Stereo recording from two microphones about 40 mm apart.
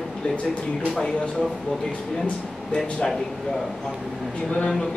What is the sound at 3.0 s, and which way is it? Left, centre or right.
Speech, centre.